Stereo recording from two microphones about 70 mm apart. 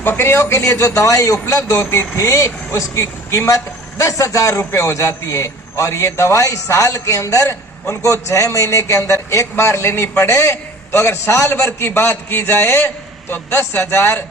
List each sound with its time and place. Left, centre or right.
0.0 s a man's voice: left